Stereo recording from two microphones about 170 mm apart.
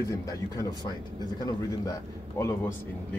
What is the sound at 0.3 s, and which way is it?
A man's voice, 20° left (ahead or behind).